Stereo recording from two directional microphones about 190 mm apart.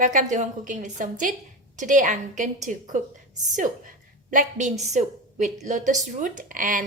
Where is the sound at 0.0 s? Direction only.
40° right (ahead or behind).